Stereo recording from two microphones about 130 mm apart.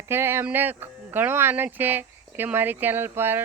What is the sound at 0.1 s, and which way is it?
Speech, 15° right (ahead or behind).